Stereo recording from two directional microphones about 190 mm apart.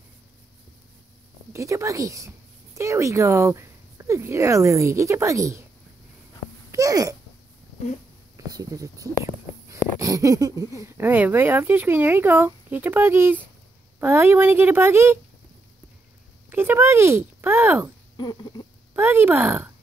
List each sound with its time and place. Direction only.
1.5 s a woman's voice: 15° right (ahead or behind)
6.7 s speech: 15° right (ahead or behind)
8.5 s speech: 20° right (ahead or behind)
16.4 s speech: 10° right (ahead or behind)
18.1 s a sound: 20° left (ahead or behind)
18.9 s speech: 10° right (ahead or behind)